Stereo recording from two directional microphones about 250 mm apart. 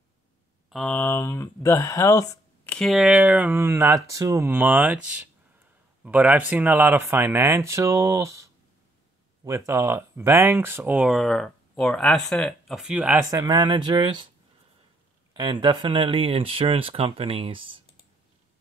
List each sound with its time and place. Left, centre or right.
0.7 s speech: centre
9.7 s speech: centre
15.3 s speech: centre